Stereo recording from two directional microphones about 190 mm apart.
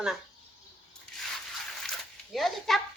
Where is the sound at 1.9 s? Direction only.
Centre (ahead or behind).